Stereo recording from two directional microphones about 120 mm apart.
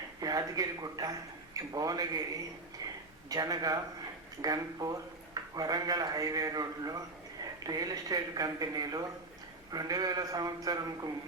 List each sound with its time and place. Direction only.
0.2 s speech: 30° right (ahead or behind)
2.8 s a sound: 35° right (ahead or behind)
3.2 s speech: 30° right (ahead or behind)